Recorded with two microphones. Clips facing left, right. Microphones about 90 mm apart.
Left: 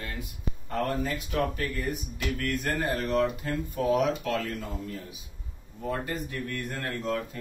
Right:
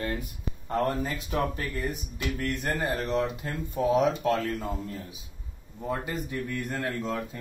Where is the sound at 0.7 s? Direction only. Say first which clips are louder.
Right 1 dB; 25° right (ahead or behind).